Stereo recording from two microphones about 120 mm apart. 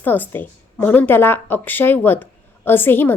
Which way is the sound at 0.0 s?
15° left (ahead or behind).